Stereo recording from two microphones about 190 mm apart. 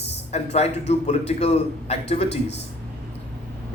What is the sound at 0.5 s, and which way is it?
A man's voice, 35° left (ahead or behind).